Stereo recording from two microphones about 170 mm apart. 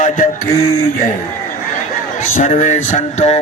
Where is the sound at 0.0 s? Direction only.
45° left (ahead or behind).